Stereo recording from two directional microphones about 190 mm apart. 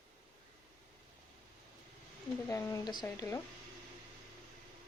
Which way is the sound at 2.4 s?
15° left (ahead or behind).